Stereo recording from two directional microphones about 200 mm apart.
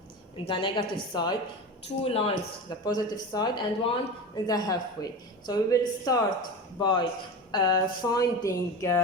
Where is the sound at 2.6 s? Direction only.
20° left (ahead or behind).